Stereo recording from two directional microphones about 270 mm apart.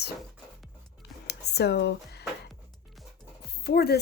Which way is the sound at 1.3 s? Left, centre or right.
Left.